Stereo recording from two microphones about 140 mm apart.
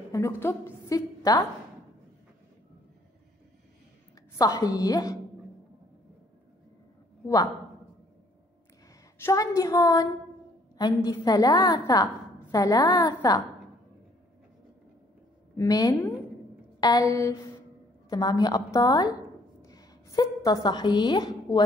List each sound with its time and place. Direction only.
0.1 s a woman's voice: 20° left (ahead or behind)
4.4 s a woman's voice: 25° left (ahead or behind)
9.2 s a woman's voice: 20° left (ahead or behind)
15.5 s a woman's voice: 25° left (ahead or behind)